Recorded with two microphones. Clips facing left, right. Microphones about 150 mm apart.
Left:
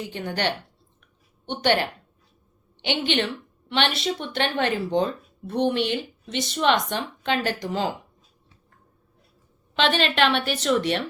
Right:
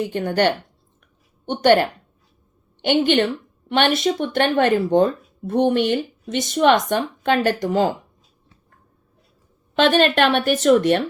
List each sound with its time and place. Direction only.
0.0 s speech: 50° right (ahead or behind)
9.7 s speech: 50° right (ahead or behind)